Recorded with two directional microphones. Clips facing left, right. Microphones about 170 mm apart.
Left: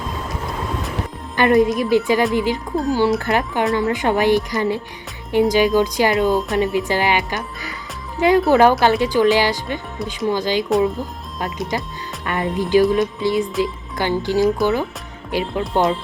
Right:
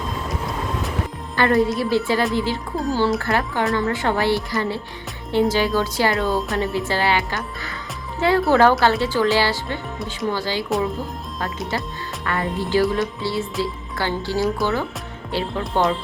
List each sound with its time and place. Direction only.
1.4 s music: 15° left (ahead or behind)
3.2 s speech: 20° left (ahead or behind)
3.8 s music: 15° left (ahead or behind)
11.7 s music: 15° left (ahead or behind)
15.7 s speech: 20° left (ahead or behind)